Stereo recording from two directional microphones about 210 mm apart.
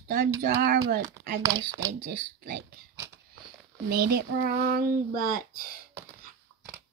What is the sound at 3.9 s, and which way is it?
Speech, 50° right (ahead or behind).